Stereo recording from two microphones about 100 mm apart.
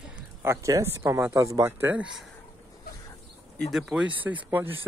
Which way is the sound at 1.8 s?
15° right (ahead or behind).